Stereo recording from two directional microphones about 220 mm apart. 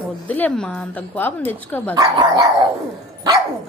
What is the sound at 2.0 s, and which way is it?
Speech, 15° right (ahead or behind).